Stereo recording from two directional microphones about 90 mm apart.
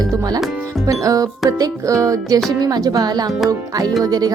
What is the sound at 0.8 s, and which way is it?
Music, 40° right (ahead or behind).